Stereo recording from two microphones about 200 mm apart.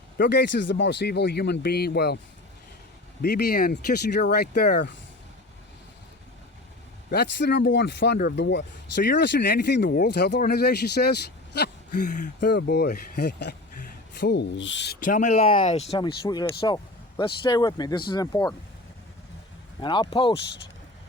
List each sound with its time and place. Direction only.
0.2 s speech: 60° left (ahead or behind)
3.2 s speech: 50° left (ahead or behind)
7.1 s speech: 55° left (ahead or behind)
11.9 s speech: 40° left (ahead or behind)
12.4 s speech: 55° left (ahead or behind)
15.0 s speech: 40° left (ahead or behind)
16.0 s speech: 20° left (ahead or behind)
19.8 s speech: 25° left (ahead or behind)